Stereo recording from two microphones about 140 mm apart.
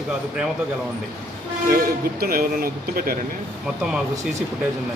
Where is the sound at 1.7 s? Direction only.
90° right.